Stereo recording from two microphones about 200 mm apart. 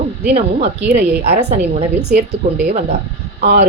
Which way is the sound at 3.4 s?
40° right (ahead or behind).